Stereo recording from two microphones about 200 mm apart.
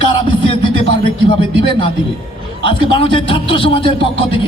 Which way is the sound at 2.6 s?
25° left (ahead or behind).